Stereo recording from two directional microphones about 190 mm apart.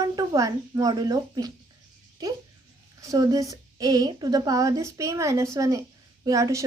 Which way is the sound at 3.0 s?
20° right (ahead or behind).